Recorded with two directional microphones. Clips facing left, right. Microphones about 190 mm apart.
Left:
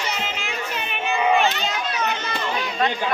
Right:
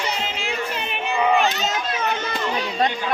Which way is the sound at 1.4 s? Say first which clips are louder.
Even; 40° right (ahead or behind).